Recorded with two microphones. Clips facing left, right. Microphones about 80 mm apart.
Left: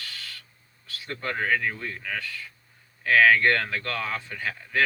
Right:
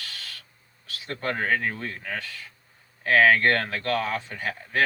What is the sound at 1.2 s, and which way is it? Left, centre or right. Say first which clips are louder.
Speech: right 1 dB; right.